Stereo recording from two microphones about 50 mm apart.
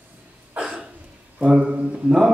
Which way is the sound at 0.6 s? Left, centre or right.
Right.